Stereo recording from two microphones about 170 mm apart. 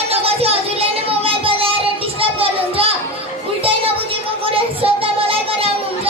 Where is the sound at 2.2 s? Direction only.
35° right (ahead or behind).